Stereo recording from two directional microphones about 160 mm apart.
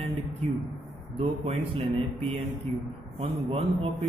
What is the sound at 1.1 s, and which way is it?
A man's voice, 35° right (ahead or behind).